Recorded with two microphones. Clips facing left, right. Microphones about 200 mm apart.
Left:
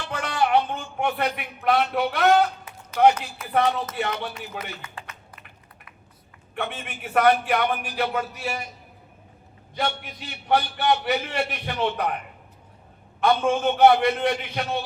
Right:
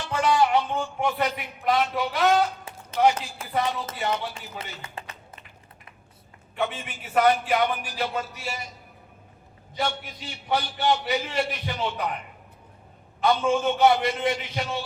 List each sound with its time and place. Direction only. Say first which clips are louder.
0.0 s music: right 3 dB; 60° left (ahead or behind)
3.5 s a man's voice: left 4 dB; 60° left (ahead or behind)
4.8 s a sound: right 1 dB; 30° right (ahead or behind)
6.6 s a man's voice: right 2 dB; 60° left (ahead or behind)
9.7 s a man's voice: left 1 dB; 60° left (ahead or behind)